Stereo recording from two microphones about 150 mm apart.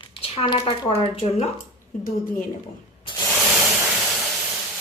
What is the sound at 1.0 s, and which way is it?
Speech, 45° left (ahead or behind).